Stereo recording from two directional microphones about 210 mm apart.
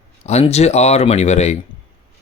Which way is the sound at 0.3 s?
30° left (ahead or behind).